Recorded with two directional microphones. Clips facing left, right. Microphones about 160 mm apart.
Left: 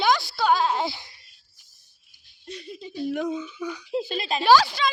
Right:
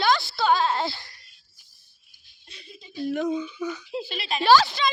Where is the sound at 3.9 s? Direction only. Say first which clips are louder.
Left 4 dB; 40° left (ahead or behind).